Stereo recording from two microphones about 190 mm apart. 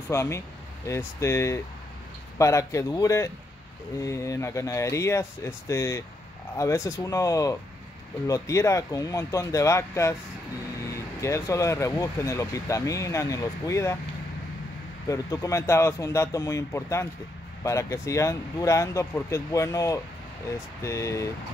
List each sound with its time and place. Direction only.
0.1 s speech: 15° left (ahead or behind)
11.1 s speech: 15° left (ahead or behind)
15.0 s speech: 15° left (ahead or behind)